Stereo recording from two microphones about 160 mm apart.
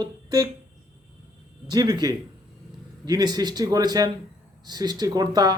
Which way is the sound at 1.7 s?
25° right (ahead or behind).